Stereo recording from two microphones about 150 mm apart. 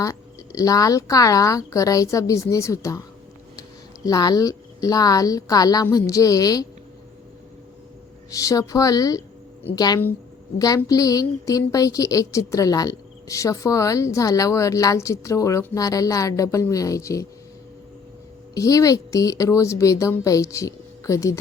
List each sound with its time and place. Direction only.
0.0 s a woman's voice: 25° left (ahead or behind)
4.0 s a woman's voice: 25° left (ahead or behind)
8.3 s a woman's voice: 20° left (ahead or behind)
18.5 s a woman's voice: 20° left (ahead or behind)